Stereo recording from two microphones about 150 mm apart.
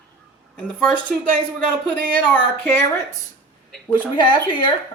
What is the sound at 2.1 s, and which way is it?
A woman's voice, 15° left (ahead or behind).